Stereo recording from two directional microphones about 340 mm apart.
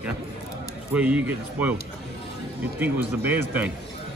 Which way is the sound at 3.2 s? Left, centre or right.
Centre.